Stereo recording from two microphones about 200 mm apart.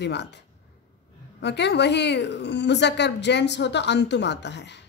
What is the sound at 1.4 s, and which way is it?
A woman's voice, 60° left (ahead or behind).